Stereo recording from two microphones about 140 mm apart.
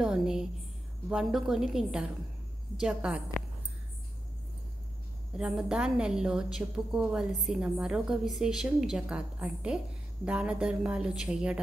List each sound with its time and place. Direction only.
0.0 s a sound: 5° right (ahead or behind)
1.0 s a woman's voice: 5° right (ahead or behind)
5.4 s a woman's voice: 5° right (ahead or behind)